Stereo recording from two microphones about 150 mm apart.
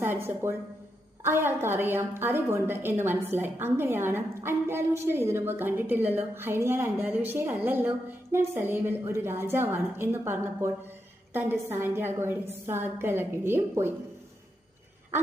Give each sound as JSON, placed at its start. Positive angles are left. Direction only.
{"t": 0.0, "sound": "a woman's voice", "side_deg": -15}